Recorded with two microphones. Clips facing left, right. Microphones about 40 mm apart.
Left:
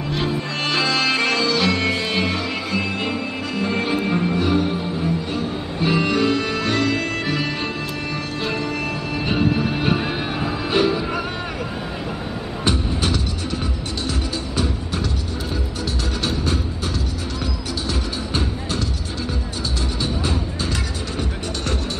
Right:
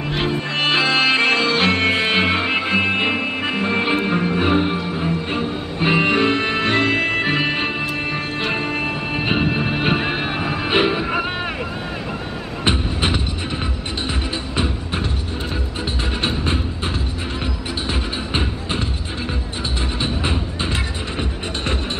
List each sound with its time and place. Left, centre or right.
0.1 s music: right
12.6 s music: right
16.2 s music: right
20.0 s music: right